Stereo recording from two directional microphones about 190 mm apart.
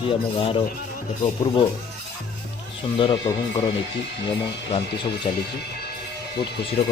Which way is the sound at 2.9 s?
25° left (ahead or behind).